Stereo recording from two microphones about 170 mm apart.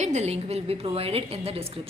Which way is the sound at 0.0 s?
40° right (ahead or behind).